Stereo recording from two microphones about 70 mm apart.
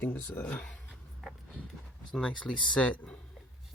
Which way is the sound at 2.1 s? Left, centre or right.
Centre.